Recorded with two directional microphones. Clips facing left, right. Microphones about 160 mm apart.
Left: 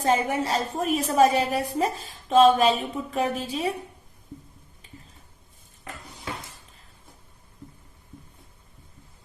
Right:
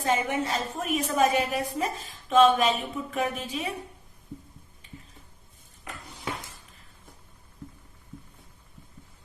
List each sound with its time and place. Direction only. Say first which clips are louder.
0.0 s a woman's voice: left 3 dB; 35° left (ahead or behind)